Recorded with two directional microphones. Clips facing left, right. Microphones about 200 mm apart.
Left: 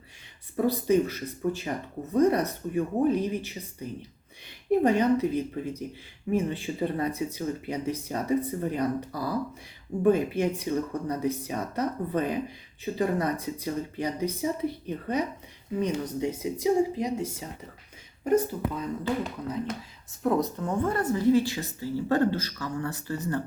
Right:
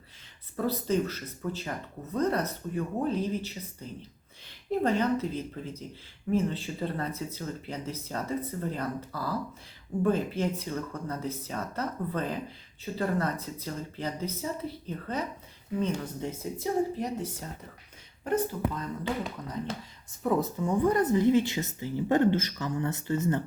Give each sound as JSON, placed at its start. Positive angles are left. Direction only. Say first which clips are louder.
{"t": 0.5, "sound": "speech", "louder": "left 5 dB", "side_deg": 15}
{"t": 20.2, "sound": "a woman's voice", "louder": "left 1 dB", "side_deg": -5}